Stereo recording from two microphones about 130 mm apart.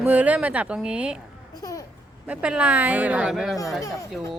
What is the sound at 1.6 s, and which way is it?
Speech, 25° left (ahead or behind).